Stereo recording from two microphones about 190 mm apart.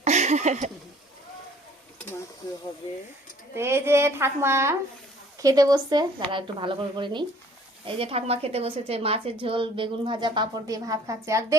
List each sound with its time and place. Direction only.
0.0 s speech: 35° right (ahead or behind)
3.5 s a woman's voice: 15° right (ahead or behind)